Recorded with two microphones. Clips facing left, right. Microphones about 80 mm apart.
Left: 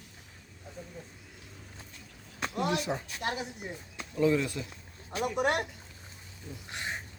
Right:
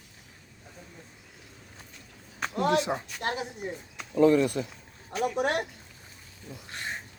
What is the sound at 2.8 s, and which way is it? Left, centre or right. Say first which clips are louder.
Speech: right 4 dB; centre.